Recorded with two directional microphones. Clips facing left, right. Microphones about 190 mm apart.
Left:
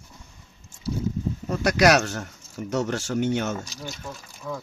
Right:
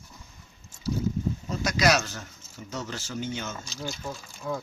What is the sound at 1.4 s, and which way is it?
Speech, 60° left (ahead or behind).